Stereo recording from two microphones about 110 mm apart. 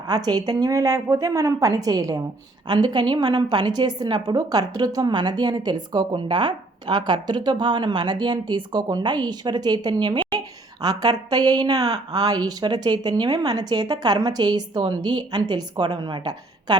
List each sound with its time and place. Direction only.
0.1 s a woman's voice: 35° right (ahead or behind)